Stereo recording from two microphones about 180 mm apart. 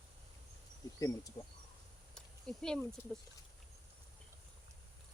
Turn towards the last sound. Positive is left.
turn(degrees=5)  # may be behind; listen again after turning